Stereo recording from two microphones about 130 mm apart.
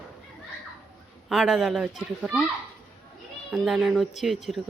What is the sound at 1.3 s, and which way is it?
A man's voice, 5° right (ahead or behind).